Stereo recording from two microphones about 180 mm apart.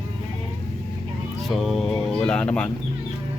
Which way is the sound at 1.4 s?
Centre (ahead or behind).